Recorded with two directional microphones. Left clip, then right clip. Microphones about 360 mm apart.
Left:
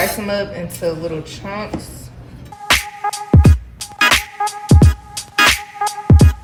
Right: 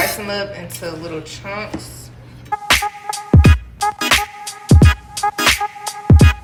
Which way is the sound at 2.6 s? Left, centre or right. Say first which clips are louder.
Left 1 dB; centre.